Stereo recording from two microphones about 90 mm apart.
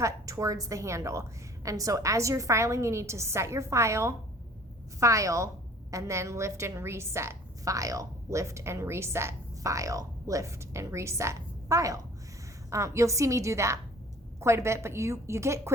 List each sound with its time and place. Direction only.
0.0 s a woman's voice: 35° right (ahead or behind)